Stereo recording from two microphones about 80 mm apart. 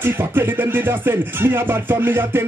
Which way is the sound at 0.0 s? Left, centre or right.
Right.